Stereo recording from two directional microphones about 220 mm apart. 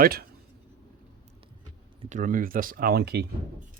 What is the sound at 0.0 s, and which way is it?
Speech, 45° right (ahead or behind).